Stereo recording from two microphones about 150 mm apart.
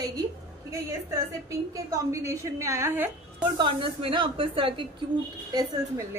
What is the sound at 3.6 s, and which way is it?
A woman's voice, 35° right (ahead or behind).